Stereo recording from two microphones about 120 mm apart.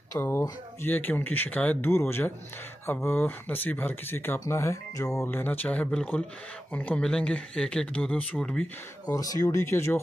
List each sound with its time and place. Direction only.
0.1 s speech: 20° left (ahead or behind)
5.3 s speech: 15° left (ahead or behind)
9.0 s speech: 30° left (ahead or behind)